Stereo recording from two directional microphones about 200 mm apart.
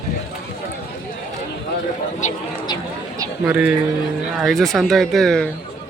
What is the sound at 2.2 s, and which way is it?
Speech, 35° left (ahead or behind).